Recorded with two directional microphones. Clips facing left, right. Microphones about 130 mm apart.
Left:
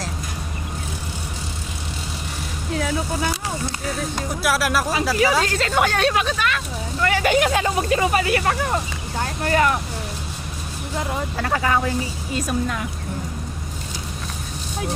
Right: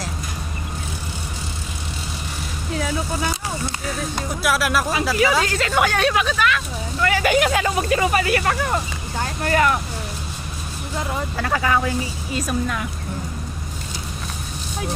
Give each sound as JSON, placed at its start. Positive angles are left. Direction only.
{"t": 2.7, "sound": "speech", "side_deg": 55}
{"t": 4.4, "sound": "speech", "side_deg": 35}
{"t": 11.3, "sound": "speech", "side_deg": 35}